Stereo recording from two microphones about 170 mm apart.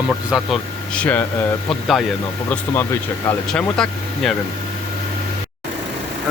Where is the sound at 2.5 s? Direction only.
10° left (ahead or behind).